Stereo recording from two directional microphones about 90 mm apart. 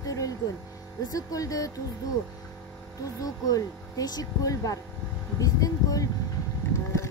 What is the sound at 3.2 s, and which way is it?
A woman's voice, 40° left (ahead or behind).